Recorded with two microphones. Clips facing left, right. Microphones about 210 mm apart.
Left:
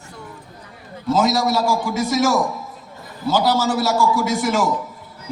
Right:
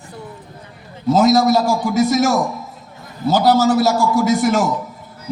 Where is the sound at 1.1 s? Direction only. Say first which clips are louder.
Right 5 dB; 40° right (ahead or behind).